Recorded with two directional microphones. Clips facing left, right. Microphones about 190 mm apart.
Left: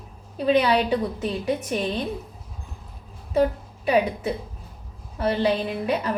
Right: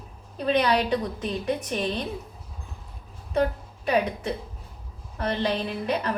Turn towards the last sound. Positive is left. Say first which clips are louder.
# left 2 dB
turn(degrees=10)  # may be behind; listen again after turning